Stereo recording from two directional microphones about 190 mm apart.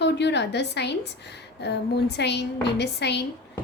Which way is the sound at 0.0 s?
65° left (ahead or behind).